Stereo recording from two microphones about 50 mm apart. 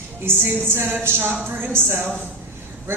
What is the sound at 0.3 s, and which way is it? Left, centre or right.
A woman's voice, right.